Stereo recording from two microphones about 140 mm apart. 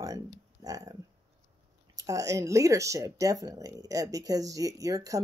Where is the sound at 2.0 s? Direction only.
25° right (ahead or behind).